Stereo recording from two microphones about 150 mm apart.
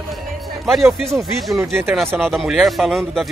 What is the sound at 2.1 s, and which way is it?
Speech, centre (ahead or behind).